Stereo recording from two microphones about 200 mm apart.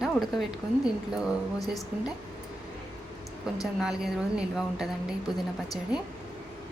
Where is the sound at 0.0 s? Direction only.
Centre (ahead or behind).